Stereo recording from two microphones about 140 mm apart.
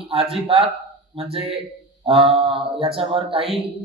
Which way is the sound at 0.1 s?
45° right (ahead or behind).